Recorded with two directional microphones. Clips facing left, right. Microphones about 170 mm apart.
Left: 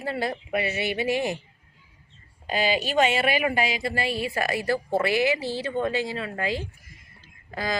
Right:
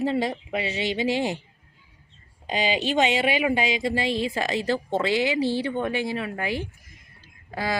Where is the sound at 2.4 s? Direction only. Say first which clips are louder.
Even; 20° right (ahead or behind).